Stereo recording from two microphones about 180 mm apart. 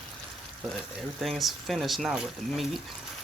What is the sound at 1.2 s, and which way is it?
Speech, centre (ahead or behind).